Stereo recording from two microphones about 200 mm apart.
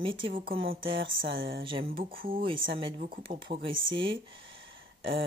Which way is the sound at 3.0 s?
45° right (ahead or behind).